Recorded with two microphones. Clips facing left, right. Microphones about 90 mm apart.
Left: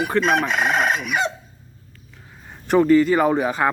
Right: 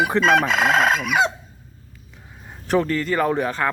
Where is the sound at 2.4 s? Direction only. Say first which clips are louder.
Left 5 dB; centre (ahead or behind).